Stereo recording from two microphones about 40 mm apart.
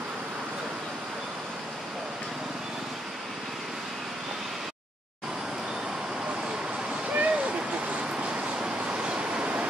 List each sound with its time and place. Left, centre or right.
7.1 s vehicle: right